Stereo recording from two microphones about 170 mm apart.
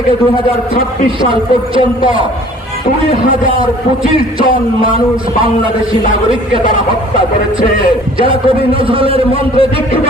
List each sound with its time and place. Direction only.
1.2 s a man's voice: 30° right (ahead or behind)
3.4 s a man's voice: 30° right (ahead or behind)
7.8 s a man's voice: 30° right (ahead or behind)